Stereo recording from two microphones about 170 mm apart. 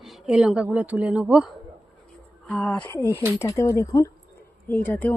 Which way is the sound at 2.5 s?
5° left (ahead or behind).